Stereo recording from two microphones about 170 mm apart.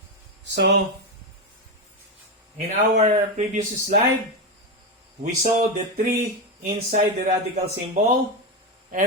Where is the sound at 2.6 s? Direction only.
45° right (ahead or behind).